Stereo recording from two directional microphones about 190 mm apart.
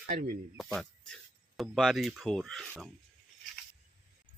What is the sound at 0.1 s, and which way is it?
Speech, 45° right (ahead or behind).